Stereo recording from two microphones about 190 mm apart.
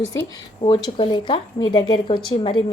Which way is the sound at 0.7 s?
25° left (ahead or behind).